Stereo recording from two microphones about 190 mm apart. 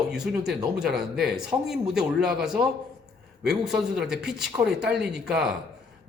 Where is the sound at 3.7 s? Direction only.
5° right (ahead or behind).